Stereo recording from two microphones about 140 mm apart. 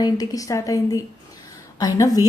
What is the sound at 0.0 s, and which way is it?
A woman's voice, 25° left (ahead or behind).